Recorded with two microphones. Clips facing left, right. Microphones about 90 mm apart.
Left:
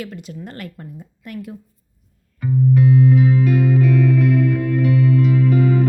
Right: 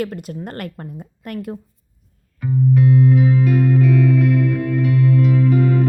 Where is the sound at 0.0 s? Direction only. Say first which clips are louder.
Right 6 dB; 50° right (ahead or behind).